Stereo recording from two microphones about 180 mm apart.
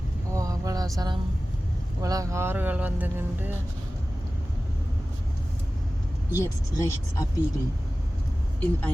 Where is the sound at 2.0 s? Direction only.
20° right (ahead or behind).